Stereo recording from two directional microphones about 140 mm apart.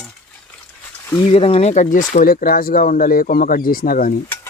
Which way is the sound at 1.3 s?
45° left (ahead or behind).